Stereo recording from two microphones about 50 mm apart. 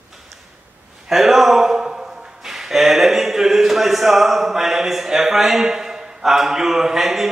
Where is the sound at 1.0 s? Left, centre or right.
Centre.